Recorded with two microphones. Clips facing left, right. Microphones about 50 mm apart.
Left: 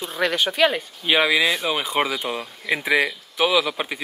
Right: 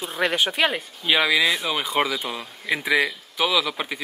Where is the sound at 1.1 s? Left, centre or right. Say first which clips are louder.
Left 1 dB; centre.